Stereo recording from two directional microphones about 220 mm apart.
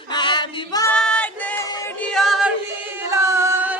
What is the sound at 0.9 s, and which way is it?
Music, 5° left (ahead or behind).